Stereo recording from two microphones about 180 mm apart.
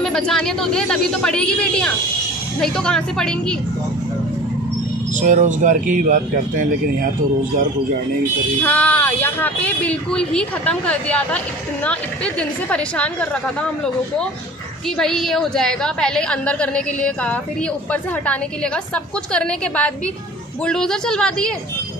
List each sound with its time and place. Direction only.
0.0 s a woman's voice: 5° left (ahead or behind)
5.2 s a man's voice: 45° right (ahead or behind)
8.6 s speech: 10° left (ahead or behind)
15.0 s a woman's voice: 5° left (ahead or behind)